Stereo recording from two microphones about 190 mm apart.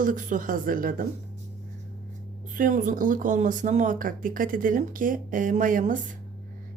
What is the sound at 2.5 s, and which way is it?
Speech, 45° right (ahead or behind).